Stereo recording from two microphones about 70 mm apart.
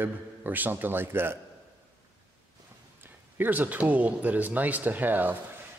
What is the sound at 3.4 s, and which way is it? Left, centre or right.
A man's voice, right.